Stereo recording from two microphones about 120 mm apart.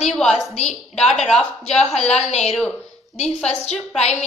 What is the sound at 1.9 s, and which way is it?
A woman's voice, 65° left (ahead or behind).